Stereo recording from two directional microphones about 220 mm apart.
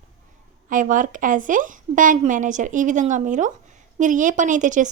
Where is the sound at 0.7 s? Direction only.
35° right (ahead or behind).